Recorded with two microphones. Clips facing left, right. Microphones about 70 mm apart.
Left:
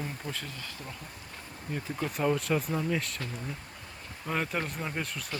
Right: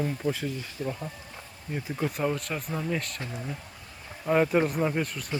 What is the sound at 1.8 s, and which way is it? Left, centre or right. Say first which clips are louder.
Speech: right 1 dB; centre.